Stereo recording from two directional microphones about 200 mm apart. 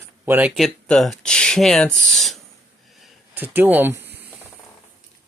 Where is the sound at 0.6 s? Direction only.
5° left (ahead or behind).